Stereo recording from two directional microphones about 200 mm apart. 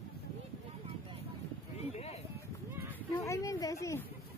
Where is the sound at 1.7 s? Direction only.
30° left (ahead or behind).